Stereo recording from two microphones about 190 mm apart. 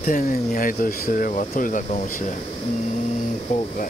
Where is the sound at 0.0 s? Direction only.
45° left (ahead or behind).